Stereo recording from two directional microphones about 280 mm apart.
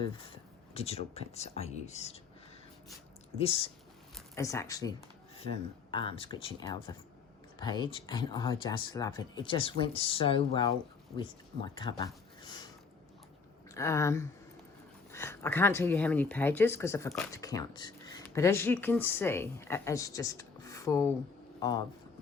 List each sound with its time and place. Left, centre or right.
0.0 s speech: centre
3.3 s speech: left
4.1 s a sound: centre
5.9 s speech: centre
13.7 s speech: centre